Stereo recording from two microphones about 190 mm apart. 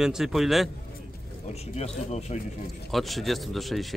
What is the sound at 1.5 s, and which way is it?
Speech, 35° left (ahead or behind).